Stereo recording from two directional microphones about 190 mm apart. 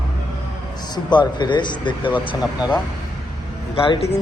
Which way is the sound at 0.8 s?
20° left (ahead or behind).